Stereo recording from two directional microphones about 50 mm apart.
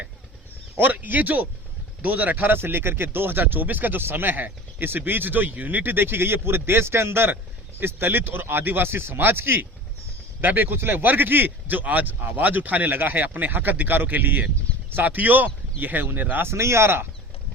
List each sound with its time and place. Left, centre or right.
0.8 s speech: right
10.4 s speech: right
16.5 s speech: right